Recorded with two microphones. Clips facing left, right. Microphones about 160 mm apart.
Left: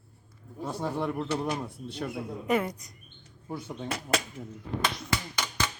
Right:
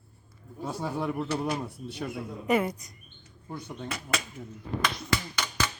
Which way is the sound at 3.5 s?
10° left (ahead or behind).